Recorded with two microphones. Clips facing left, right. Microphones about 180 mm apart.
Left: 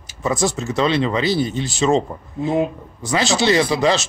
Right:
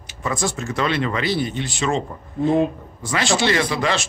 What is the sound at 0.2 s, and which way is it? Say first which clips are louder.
A man's voice: left 4 dB; 20° left (ahead or behind).